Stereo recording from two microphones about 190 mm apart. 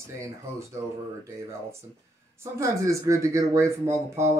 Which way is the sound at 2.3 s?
15° right (ahead or behind).